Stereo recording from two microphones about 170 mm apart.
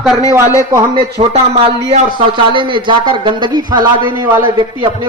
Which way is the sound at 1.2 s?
35° right (ahead or behind).